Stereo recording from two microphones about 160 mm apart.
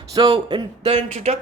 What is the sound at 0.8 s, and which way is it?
Speech, 40° right (ahead or behind).